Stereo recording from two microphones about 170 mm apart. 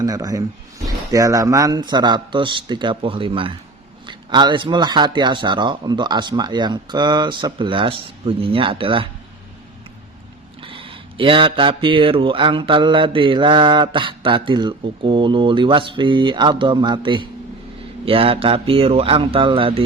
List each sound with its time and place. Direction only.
0.0 s speech: 20° right (ahead or behind)
10.6 s speech: 30° right (ahead or behind)